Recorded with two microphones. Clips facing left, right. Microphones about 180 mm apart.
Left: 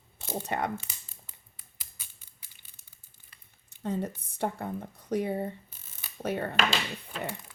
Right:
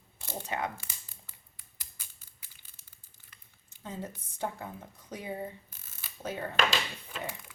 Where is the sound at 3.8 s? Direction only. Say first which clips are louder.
Left 8 dB; 65° left (ahead or behind).